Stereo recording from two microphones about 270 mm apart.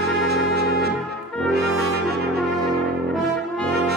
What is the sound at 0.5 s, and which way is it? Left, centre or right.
Music, right.